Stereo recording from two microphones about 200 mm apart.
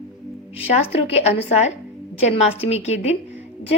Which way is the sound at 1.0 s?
30° left (ahead or behind).